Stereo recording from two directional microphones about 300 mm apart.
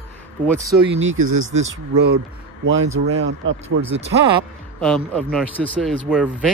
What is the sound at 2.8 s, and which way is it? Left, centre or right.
Speech, right.